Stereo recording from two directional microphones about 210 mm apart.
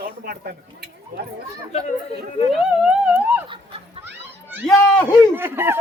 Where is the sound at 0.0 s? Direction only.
50° right (ahead or behind).